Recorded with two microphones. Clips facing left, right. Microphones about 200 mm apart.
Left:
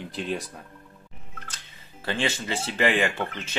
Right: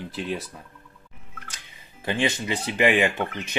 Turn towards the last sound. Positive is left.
turn(degrees=-15)  # may be behind; listen again after turning